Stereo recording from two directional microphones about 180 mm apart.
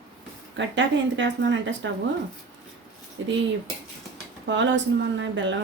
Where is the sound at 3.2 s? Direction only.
90° right.